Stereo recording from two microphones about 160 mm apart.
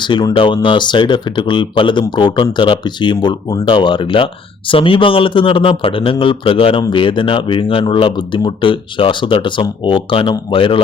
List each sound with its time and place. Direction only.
0.0 s speech: 30° left (ahead or behind)